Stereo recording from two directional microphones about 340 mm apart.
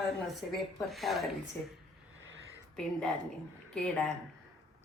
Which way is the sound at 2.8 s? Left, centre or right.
Centre.